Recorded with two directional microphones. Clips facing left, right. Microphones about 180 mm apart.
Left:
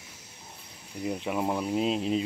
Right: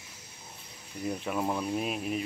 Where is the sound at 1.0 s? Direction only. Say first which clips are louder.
Left 2 dB; 15° left (ahead or behind).